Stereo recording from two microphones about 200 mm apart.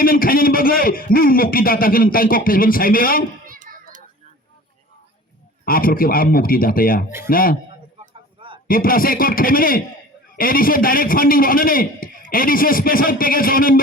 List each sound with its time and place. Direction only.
0.0 s a man's voice: 45° left (ahead or behind)
3.4 s children playing: 45° right (ahead or behind)
5.6 s a man's voice: 45° left (ahead or behind)
8.4 s a sound: 25° right (ahead or behind)
8.6 s a man's voice: 45° left (ahead or behind)